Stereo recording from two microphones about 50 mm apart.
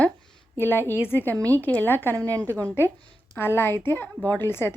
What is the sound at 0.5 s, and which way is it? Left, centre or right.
Speech, left.